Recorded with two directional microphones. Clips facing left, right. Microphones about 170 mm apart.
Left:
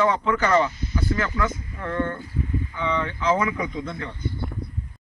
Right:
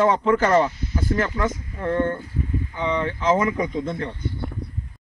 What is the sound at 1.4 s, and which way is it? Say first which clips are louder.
Speech: right 2 dB; 30° right (ahead or behind).